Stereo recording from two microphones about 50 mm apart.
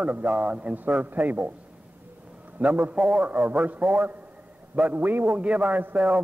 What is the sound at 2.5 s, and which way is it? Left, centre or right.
A man's voice, right.